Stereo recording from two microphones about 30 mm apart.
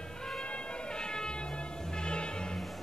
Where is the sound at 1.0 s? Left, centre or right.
Left.